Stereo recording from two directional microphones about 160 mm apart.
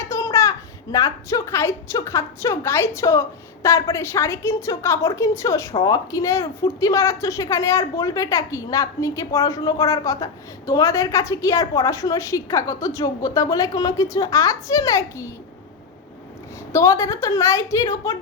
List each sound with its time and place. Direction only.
0.1 s a child's voice: 20° left (ahead or behind)
16.7 s a woman's voice: 20° left (ahead or behind)